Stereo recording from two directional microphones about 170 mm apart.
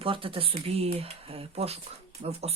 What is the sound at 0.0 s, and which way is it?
Speech, 30° right (ahead or behind).